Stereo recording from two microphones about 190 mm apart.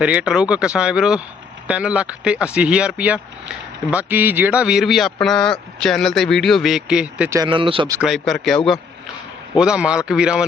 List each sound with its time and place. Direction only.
0.0 s speech: 5° right (ahead or behind)
7.3 s speech: 25° right (ahead or behind)
8.0 s speech: centre (ahead or behind)